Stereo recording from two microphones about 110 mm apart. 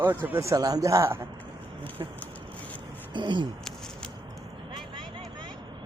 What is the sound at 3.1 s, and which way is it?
Speech, 45° right (ahead or behind).